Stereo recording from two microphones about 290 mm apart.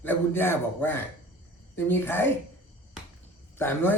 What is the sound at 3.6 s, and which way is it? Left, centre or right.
Speech, centre.